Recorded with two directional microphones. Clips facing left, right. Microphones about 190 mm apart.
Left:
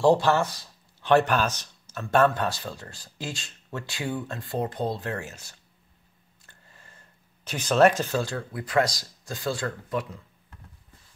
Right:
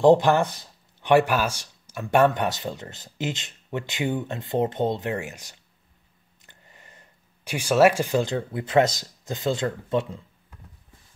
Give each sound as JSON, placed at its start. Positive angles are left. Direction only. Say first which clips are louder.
{"t": 0.0, "sound": "speech", "louder": "right 4 dB", "side_deg": -20}